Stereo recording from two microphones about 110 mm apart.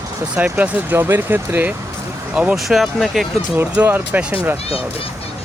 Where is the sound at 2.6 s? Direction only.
Centre (ahead or behind).